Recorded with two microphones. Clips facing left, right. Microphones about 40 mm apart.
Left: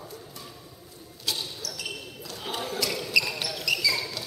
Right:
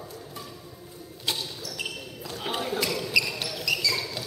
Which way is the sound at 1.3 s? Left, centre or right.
Right.